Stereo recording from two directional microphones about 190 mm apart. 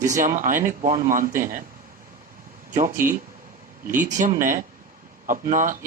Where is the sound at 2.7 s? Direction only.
45° right (ahead or behind).